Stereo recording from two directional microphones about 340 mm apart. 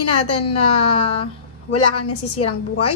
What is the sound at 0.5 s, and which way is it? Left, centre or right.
A woman's voice, centre.